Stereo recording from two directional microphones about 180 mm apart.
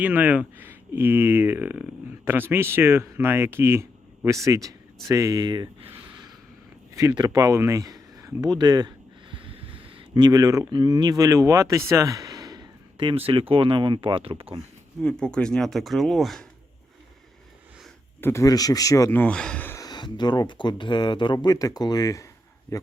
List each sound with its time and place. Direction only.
0.0 s speech: 10° right (ahead or behind)
6.9 s speech: 15° right (ahead or behind)
15.2 s speech: 5° left (ahead or behind)
18.2 s speech: 15° left (ahead or behind)